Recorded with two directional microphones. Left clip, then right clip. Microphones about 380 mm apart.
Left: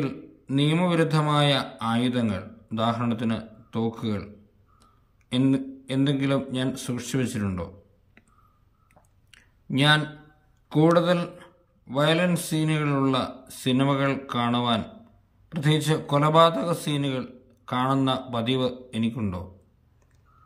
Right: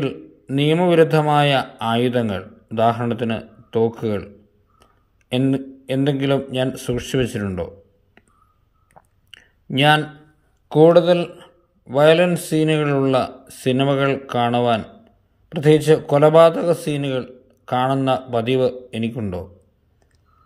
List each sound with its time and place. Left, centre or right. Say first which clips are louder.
0.0 s a man's voice: right 6 dB; centre
5.3 s a man's voice: right 4 dB; centre
9.0 s chewing: right 11 dB; right
9.3 s a sound: right 4 dB; centre
10.7 s a man's voice: right 8 dB; centre